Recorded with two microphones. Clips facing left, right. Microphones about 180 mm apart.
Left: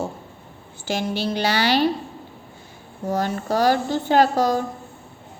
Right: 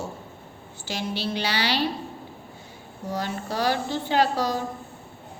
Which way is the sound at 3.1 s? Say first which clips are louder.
Left 6 dB; 45° left (ahead or behind).